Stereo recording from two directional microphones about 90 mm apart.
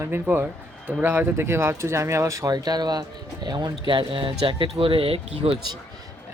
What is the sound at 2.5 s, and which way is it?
Speech, 50° right (ahead or behind).